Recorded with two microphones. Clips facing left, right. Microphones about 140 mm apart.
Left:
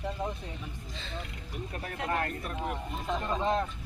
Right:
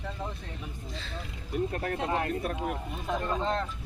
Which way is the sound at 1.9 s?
20° right (ahead or behind).